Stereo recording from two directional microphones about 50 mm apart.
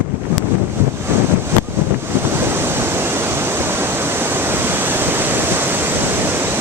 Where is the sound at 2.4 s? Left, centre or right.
Right.